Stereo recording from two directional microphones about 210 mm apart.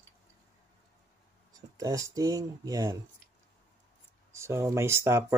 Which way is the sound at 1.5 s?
15° right (ahead or behind).